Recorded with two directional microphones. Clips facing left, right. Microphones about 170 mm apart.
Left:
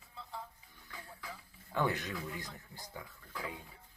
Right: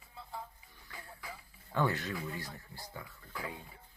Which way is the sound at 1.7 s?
15° left (ahead or behind).